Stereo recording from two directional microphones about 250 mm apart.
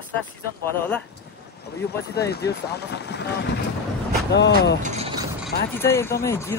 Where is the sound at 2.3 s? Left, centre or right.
Left.